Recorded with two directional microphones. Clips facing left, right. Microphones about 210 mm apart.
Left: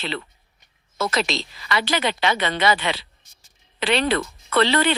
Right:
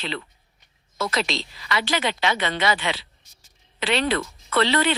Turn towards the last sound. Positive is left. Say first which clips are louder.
# left 2 dB
turn(degrees=50)  # may be behind; listen again after turning